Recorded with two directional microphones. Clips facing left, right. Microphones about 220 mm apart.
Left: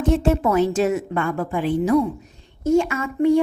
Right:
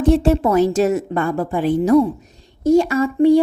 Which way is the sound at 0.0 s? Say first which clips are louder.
Right 4 dB; 35° right (ahead or behind).